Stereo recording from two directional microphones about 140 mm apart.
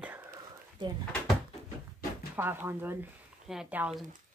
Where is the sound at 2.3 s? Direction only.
15° right (ahead or behind).